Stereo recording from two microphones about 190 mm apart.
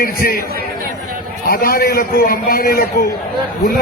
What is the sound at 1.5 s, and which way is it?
A man's voice, 50° left (ahead or behind).